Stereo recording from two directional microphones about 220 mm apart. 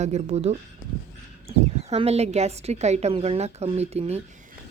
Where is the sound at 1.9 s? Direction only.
30° right (ahead or behind).